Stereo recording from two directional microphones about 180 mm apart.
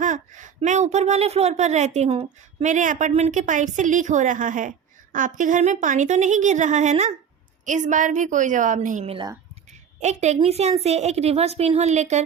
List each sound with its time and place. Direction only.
0.0 s a woman's voice: 45° right (ahead or behind)
9.0 s speech: 30° right (ahead or behind)
10.0 s a woman's voice: 40° right (ahead or behind)